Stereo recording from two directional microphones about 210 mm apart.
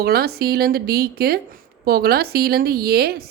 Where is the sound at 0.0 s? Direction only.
45° right (ahead or behind).